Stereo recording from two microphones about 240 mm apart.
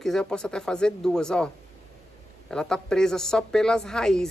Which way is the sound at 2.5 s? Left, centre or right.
Centre.